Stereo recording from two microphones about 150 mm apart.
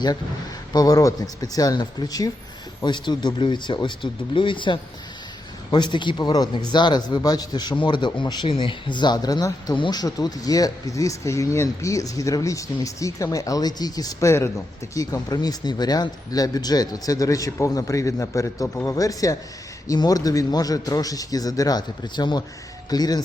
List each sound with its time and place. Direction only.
0.7 s a man's voice: 25° left (ahead or behind)